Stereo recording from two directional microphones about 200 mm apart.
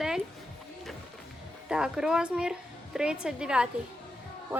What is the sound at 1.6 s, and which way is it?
A woman's voice, 5° right (ahead or behind).